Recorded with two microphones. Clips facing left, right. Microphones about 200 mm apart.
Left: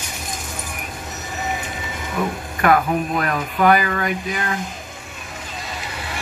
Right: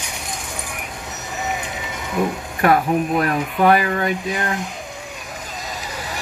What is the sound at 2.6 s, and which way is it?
Speech, 30° right (ahead or behind).